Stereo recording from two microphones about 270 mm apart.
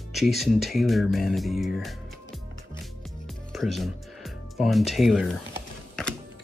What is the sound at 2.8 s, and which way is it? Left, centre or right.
Music, centre.